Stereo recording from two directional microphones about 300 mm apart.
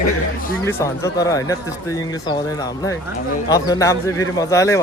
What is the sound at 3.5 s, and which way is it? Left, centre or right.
Speech, centre.